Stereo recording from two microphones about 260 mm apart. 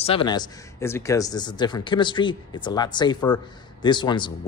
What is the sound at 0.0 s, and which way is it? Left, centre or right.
Speech, centre.